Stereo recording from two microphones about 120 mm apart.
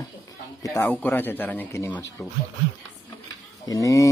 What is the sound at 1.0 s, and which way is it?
Speech, 15° left (ahead or behind).